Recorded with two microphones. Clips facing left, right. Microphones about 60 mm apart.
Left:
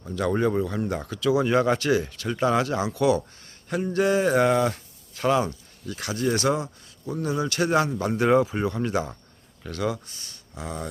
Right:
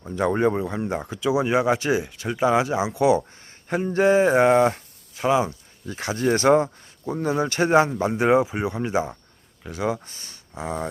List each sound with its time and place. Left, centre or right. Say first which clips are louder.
0.0 s speech: right 3 dB; right
5.1 s speech: right 2 dB; centre
5.8 s speech: right 3 dB; right
9.9 s speech: right 4 dB; right